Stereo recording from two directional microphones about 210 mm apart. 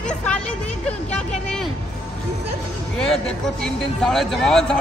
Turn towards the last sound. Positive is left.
turn(degrees=5)  # may be behind; listen again after turning